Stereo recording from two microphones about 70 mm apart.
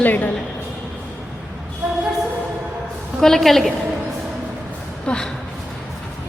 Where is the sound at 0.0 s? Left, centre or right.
Left.